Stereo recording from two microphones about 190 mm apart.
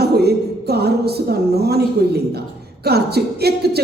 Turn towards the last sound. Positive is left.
turn(degrees=-55)  # may be behind; listen again after turning